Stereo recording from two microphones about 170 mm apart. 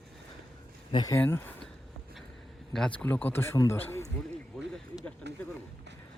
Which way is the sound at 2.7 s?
5° left (ahead or behind).